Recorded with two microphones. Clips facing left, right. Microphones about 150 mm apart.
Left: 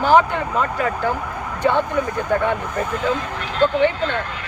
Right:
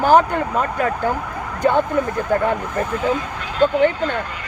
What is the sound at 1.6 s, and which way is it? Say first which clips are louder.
Speech: right 2 dB; 45° right (ahead or behind).